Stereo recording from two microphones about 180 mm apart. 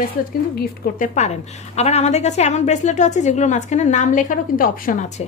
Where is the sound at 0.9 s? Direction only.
40° left (ahead or behind).